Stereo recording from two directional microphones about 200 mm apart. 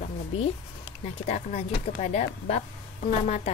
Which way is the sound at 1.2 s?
35° left (ahead or behind).